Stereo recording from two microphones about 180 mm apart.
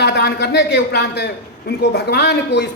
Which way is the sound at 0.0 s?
65° left (ahead or behind).